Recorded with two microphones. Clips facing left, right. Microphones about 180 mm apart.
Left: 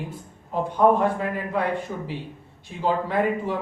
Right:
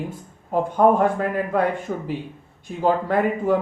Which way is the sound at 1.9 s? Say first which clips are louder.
Right 4 dB; 60° right (ahead or behind).